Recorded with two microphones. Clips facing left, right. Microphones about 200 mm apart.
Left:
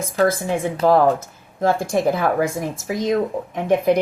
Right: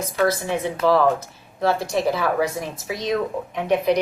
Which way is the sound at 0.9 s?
50° left (ahead or behind).